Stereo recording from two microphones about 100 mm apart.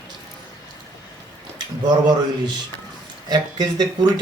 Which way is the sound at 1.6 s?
45° right (ahead or behind).